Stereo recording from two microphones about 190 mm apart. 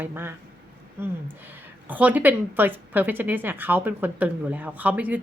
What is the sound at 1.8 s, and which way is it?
A woman's voice, 10° right (ahead or behind).